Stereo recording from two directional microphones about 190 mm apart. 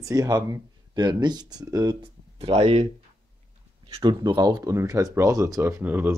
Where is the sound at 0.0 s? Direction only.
20° right (ahead or behind).